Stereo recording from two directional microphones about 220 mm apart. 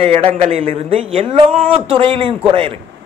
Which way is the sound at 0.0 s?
25° right (ahead or behind).